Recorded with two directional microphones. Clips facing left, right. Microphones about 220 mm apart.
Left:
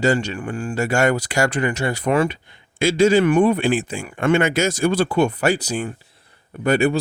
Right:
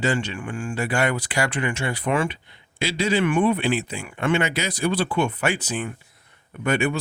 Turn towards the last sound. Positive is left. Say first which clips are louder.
# left 5 dB
turn(degrees=35)  # may be behind; listen again after turning